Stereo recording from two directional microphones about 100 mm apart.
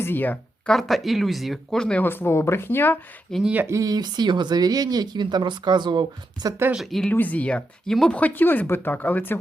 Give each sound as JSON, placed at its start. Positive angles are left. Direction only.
{"t": 0.0, "sound": "speech", "side_deg": 20}
{"t": 0.7, "sound": "speech", "side_deg": 0}
{"t": 3.4, "sound": "speech", "side_deg": -15}
{"t": 3.7, "sound": "speech", "side_deg": -35}
{"t": 6.7, "sound": "speech", "side_deg": 5}
{"t": 7.1, "sound": "speech", "side_deg": 15}